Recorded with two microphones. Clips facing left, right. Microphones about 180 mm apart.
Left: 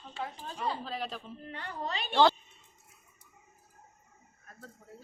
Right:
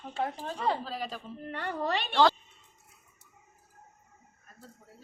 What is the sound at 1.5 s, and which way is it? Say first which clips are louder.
Speech: right 6 dB; 70° right (ahead or behind).